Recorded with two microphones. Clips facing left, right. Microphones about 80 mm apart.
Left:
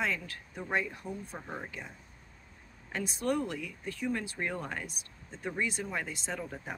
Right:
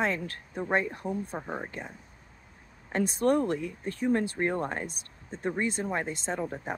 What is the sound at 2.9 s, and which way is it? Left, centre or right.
Speech, right.